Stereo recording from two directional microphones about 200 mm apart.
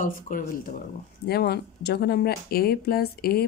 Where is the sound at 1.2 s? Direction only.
50° left (ahead or behind).